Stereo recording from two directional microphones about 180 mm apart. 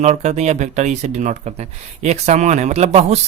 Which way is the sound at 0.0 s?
40° right (ahead or behind).